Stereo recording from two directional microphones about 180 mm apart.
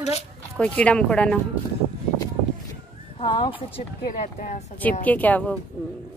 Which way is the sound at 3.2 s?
30° left (ahead or behind).